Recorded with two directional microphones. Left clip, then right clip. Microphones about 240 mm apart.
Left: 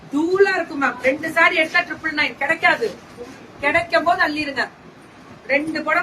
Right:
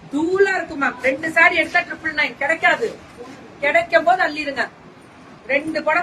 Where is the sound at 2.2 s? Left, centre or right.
Centre.